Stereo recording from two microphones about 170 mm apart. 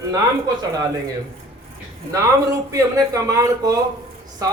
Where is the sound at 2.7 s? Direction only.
20° right (ahead or behind).